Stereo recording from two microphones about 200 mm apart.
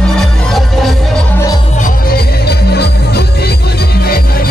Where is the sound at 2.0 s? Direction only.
50° left (ahead or behind).